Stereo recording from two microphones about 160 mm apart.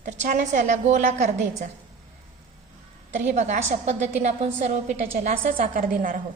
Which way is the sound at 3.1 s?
50° right (ahead or behind).